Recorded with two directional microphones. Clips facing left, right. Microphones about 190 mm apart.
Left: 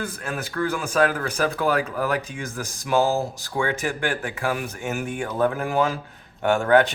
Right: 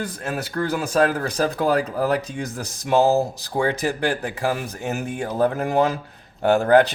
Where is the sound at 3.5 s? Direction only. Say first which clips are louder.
Right 3 dB; 40° right (ahead or behind).